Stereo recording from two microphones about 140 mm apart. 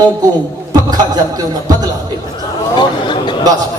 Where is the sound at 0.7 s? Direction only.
30° right (ahead or behind).